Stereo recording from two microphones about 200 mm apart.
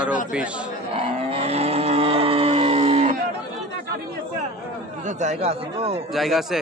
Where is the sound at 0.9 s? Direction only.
30° right (ahead or behind).